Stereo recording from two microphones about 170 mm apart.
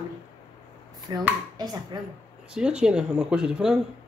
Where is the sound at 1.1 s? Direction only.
25° right (ahead or behind).